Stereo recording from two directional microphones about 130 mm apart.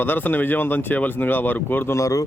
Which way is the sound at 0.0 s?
15° left (ahead or behind).